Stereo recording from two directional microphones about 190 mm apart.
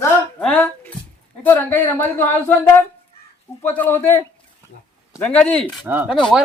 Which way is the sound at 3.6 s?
10° left (ahead or behind).